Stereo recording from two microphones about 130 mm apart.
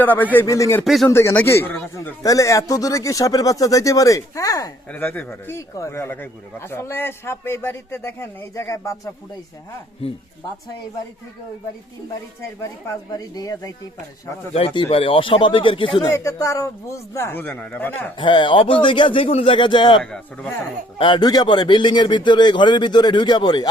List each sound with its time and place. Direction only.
0.0 s speech: 15° left (ahead or behind)
0.4 s speech: 25° left (ahead or behind)
2.2 s speech: 25° left (ahead or behind)
4.9 s speech: 15° left (ahead or behind)
12.4 s speech: 25° left (ahead or behind)
14.5 s a man's voice: 45° left (ahead or behind)
16.1 s speech: 25° left (ahead or behind)
18.2 s a man's voice: 40° left (ahead or behind)
20.0 s speech: 5° left (ahead or behind)
21.0 s a man's voice: 35° left (ahead or behind)